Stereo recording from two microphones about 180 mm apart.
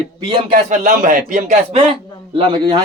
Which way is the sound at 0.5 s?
45° right (ahead or behind).